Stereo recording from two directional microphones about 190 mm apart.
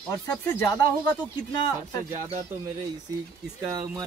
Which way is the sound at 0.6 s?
15° left (ahead or behind).